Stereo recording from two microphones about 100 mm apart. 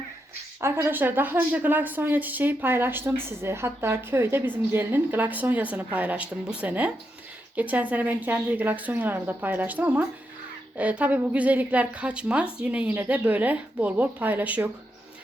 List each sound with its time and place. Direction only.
0.6 s a woman's voice: 25° right (ahead or behind)